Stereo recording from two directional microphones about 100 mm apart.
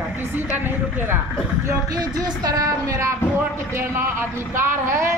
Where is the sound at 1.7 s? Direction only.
40° right (ahead or behind).